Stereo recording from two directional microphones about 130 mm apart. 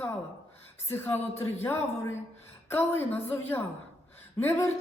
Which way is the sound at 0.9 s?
15° left (ahead or behind).